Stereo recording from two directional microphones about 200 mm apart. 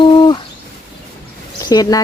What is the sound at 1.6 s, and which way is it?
Speech, 20° left (ahead or behind).